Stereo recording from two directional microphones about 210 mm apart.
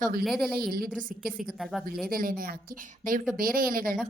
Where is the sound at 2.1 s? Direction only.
45° right (ahead or behind).